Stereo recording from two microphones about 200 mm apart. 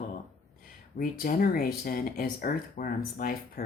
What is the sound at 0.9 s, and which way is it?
Speech, 45° left (ahead or behind).